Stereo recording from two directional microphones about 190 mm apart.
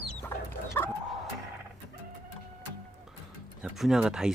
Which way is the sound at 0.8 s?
10° left (ahead or behind).